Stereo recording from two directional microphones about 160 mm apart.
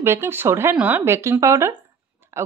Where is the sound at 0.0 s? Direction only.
15° right (ahead or behind).